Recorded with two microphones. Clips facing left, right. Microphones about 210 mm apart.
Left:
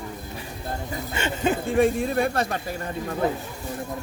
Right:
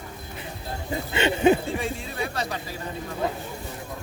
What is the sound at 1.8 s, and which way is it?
Speech, 55° left (ahead or behind).